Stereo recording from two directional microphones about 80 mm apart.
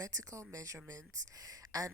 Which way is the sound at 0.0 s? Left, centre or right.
Right.